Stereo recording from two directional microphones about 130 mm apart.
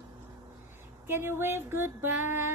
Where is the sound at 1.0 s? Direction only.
20° right (ahead or behind).